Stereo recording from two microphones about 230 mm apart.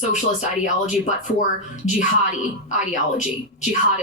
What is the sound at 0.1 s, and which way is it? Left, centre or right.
Speech, left.